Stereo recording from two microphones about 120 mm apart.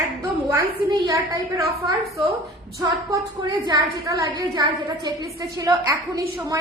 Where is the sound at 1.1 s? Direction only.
25° right (ahead or behind).